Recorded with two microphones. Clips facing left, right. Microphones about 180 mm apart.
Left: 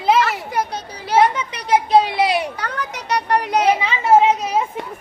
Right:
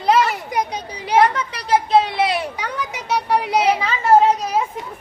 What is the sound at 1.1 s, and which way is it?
Speech, 10° left (ahead or behind).